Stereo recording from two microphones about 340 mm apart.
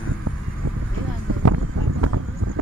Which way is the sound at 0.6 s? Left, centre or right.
Right.